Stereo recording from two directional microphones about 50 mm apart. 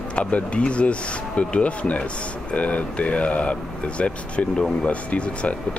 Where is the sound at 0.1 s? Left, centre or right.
Left.